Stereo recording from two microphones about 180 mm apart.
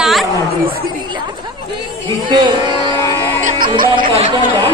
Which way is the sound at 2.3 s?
25° right (ahead or behind).